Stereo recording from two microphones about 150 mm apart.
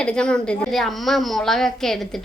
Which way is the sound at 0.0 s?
5° left (ahead or behind).